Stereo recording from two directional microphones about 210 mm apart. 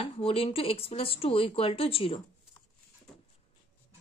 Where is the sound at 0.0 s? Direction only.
25° left (ahead or behind).